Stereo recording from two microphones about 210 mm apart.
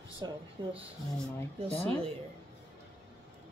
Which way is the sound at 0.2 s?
20° right (ahead or behind).